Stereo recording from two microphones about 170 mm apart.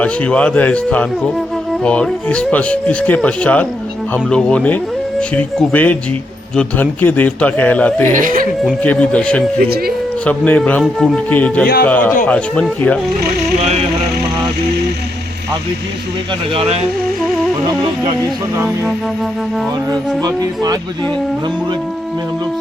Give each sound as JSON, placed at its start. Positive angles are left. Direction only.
{"t": 0.0, "sound": "speech", "side_deg": 5}
{"t": 8.1, "sound": "speech", "side_deg": -55}
{"t": 8.8, "sound": "speech", "side_deg": 10}
{"t": 9.6, "sound": "speech", "side_deg": -65}
{"t": 10.2, "sound": "speech", "side_deg": 10}
{"t": 11.6, "sound": "speech", "side_deg": 60}
{"t": 11.9, "sound": "speech", "side_deg": 10}
{"t": 16.6, "sound": "speech", "side_deg": -40}
{"t": 18.5, "sound": "music", "side_deg": -15}
{"t": 20.2, "sound": "speech", "side_deg": -20}